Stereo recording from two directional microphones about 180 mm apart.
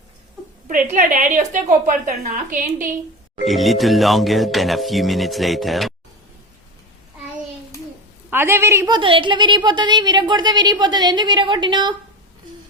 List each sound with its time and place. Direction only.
0.7 s a woman's voice: 50° right (ahead or behind)
3.3 s speech: centre (ahead or behind)
8.3 s a woman's voice: 15° right (ahead or behind)
9.0 s speech: 30° right (ahead or behind)